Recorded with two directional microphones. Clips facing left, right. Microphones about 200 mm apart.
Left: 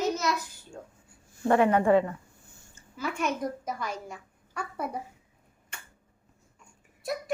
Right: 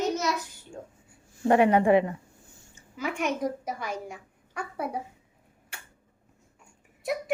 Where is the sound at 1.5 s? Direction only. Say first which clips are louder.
Right 1 dB; 15° right (ahead or behind).